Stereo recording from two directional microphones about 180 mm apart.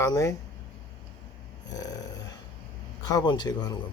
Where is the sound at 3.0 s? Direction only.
20° left (ahead or behind).